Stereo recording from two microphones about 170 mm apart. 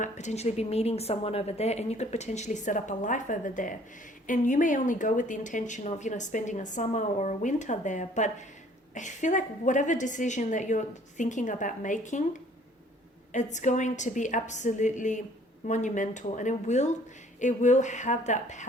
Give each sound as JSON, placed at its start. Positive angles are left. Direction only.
{"t": 0.0, "sound": "a woman's voice", "side_deg": 45}
{"t": 13.3, "sound": "speech", "side_deg": 45}